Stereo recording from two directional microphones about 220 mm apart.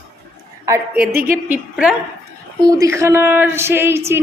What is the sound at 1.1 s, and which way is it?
Speech, 40° right (ahead or behind).